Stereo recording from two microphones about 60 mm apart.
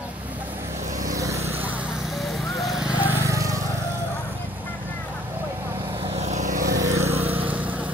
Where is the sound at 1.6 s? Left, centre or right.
Right.